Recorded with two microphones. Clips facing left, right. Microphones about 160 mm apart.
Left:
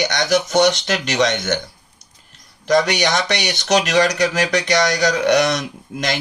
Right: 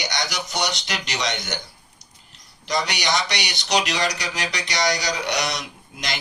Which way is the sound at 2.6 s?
50° left (ahead or behind).